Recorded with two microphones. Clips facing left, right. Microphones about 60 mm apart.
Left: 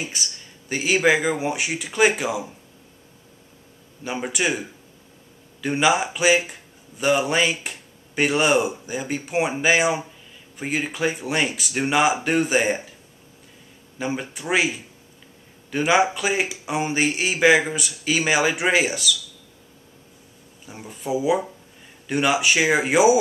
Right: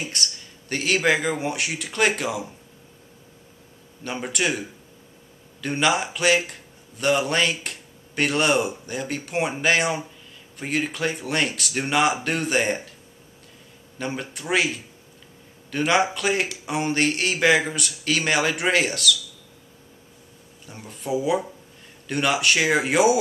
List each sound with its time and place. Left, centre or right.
0.0 s speech: centre
4.0 s speech: centre
13.9 s speech: centre
20.6 s speech: centre